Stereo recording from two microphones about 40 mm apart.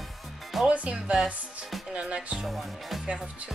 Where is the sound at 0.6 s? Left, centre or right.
Right.